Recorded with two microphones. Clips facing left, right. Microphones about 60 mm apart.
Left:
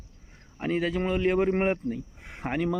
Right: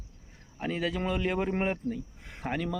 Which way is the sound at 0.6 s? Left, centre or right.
Centre.